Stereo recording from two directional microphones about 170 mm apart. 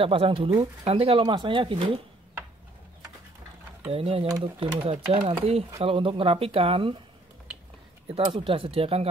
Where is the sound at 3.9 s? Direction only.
35° right (ahead or behind).